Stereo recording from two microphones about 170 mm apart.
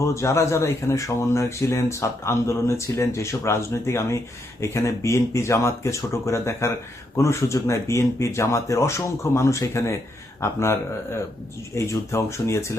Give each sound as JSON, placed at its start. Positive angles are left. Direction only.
{"t": 0.0, "sound": "speech", "side_deg": 15}